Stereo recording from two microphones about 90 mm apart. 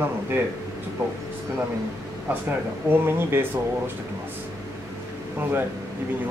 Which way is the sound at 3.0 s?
25° right (ahead or behind).